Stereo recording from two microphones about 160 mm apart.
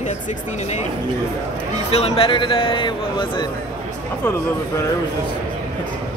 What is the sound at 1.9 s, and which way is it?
Speech, 40° left (ahead or behind).